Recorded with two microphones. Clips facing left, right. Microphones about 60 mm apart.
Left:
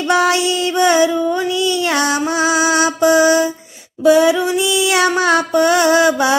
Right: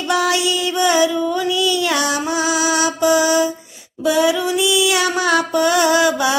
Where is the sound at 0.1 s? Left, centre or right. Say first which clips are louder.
Left 3 dB; left.